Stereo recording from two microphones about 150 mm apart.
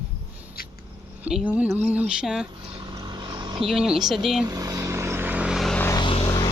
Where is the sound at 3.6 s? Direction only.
5° right (ahead or behind).